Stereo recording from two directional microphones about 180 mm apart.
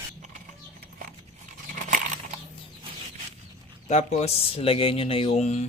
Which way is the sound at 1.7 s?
45° right (ahead or behind).